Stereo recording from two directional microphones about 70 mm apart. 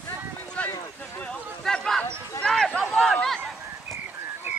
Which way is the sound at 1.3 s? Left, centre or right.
Centre.